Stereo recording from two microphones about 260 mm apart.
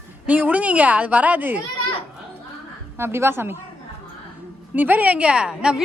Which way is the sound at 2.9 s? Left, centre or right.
Centre.